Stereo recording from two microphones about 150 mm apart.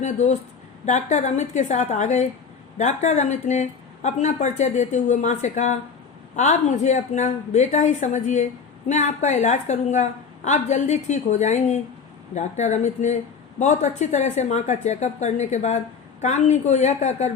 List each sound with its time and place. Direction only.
0.0 s speech: 50° left (ahead or behind)